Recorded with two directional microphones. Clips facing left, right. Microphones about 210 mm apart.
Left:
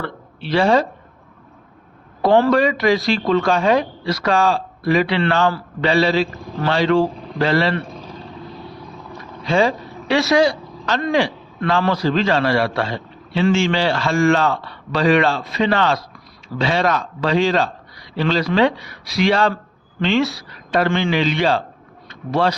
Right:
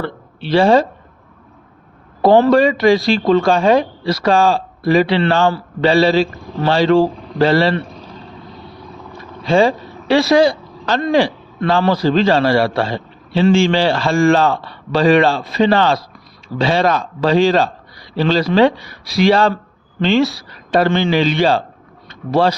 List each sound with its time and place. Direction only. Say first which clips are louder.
0.0 s speech: right 4 dB; 30° right (ahead or behind)
2.2 s speech: right 4 dB; 30° right (ahead or behind)
9.5 s speech: right 4 dB; 30° right (ahead or behind)